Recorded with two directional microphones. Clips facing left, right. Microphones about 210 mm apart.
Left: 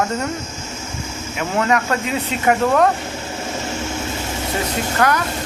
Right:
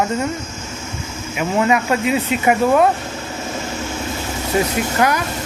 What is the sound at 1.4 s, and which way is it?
Speech, 10° right (ahead or behind).